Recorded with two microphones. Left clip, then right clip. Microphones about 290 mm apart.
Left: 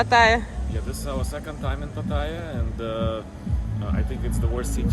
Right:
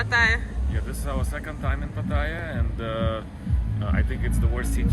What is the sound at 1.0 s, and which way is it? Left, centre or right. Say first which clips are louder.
Speech: left 1 dB; centre.